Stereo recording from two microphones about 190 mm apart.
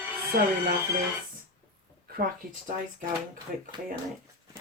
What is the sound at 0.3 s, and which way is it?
Speech, 50° right (ahead or behind).